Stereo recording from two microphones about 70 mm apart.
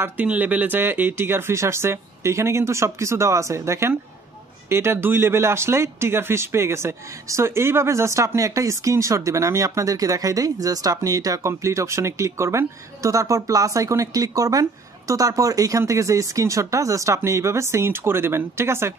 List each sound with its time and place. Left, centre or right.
0.0 s a man's voice: right
15.8 s speech: right